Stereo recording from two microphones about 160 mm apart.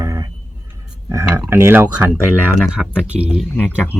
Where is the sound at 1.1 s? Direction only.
15° right (ahead or behind).